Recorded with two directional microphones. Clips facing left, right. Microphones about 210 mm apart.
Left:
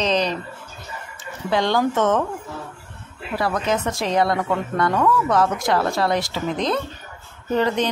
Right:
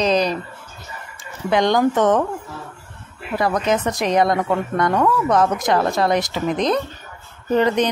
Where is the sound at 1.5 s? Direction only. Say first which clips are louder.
Right 3 dB; 15° right (ahead or behind).